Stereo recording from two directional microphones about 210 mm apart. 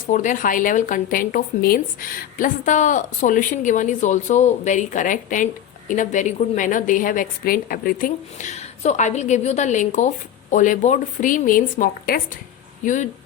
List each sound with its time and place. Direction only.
0.1 s speech: 35° left (ahead or behind)